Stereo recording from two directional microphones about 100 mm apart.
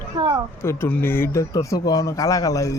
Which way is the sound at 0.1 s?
50° right (ahead or behind).